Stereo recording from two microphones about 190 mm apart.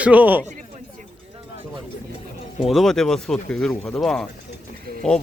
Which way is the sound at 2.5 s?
Centre (ahead or behind).